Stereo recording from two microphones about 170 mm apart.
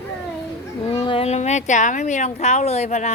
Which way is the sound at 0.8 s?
35° left (ahead or behind).